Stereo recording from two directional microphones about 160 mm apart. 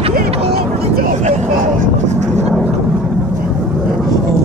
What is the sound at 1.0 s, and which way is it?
Vehicle, 45° right (ahead or behind).